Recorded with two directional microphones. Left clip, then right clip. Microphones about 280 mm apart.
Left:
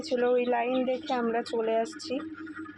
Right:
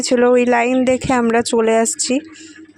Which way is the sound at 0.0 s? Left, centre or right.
Right.